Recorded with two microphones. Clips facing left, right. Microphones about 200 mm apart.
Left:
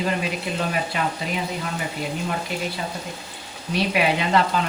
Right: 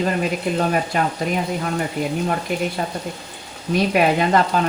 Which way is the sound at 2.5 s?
50° right (ahead or behind).